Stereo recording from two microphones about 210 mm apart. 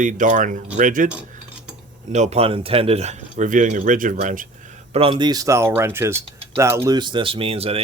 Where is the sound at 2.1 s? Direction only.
30° right (ahead or behind).